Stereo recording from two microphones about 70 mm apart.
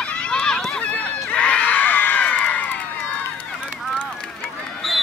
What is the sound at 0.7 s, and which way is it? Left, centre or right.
Crowd, centre.